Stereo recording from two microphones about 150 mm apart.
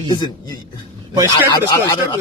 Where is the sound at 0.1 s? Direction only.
25° left (ahead or behind).